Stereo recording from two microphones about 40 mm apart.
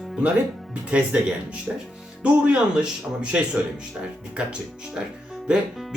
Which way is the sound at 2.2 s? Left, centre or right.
Right.